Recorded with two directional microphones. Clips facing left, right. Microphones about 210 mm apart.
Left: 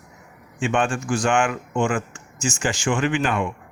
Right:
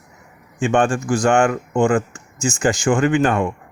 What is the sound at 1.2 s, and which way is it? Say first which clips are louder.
Speech: right 6 dB; 40° right (ahead or behind).